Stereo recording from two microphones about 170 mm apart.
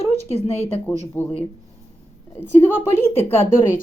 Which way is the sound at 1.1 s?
10° left (ahead or behind).